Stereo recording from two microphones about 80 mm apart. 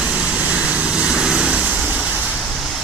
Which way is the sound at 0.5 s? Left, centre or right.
Centre.